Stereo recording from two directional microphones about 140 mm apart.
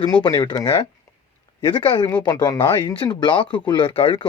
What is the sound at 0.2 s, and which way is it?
A man's voice, 30° left (ahead or behind).